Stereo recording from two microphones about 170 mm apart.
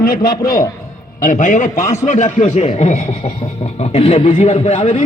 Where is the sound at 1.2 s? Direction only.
50° left (ahead or behind).